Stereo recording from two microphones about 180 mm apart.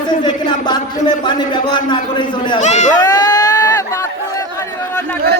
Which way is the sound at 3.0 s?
20° left (ahead or behind).